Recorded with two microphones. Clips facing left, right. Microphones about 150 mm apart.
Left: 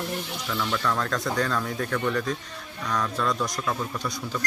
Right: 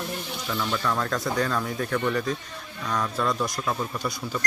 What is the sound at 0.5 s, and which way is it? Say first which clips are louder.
Speech: even; 10° right (ahead or behind).